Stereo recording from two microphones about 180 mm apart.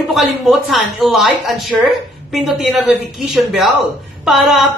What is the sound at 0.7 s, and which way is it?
A woman's voice, centre (ahead or behind).